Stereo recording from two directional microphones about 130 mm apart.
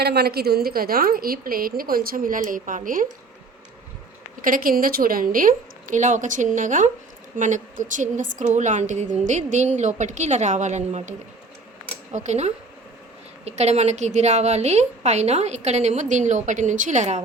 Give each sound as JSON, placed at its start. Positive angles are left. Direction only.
{"t": 1.1, "sound": "speech", "side_deg": -90}
{"t": 4.4, "sound": "a woman's voice", "side_deg": -90}
{"t": 12.1, "sound": "a woman's voice", "side_deg": -60}